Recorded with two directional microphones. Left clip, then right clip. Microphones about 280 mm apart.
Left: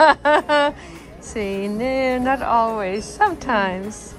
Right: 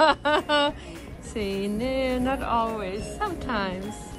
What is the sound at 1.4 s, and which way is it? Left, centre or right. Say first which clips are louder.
Speech: left 4 dB; left.